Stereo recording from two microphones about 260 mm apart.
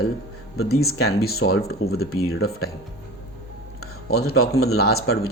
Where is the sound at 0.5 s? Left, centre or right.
Left.